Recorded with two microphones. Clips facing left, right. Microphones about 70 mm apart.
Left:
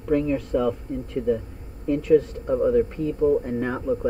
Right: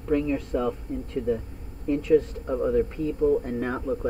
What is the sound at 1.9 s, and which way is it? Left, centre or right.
Speech, left.